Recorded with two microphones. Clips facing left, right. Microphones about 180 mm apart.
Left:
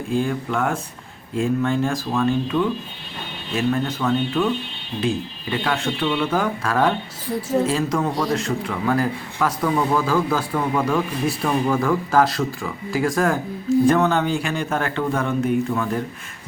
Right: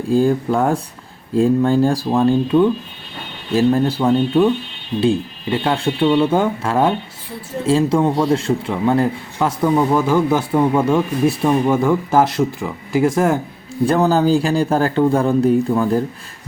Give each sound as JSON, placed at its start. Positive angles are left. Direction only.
{"t": 0.1, "sound": "a man's voice", "side_deg": -35}